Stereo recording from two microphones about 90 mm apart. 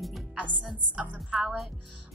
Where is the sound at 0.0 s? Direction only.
Centre (ahead or behind).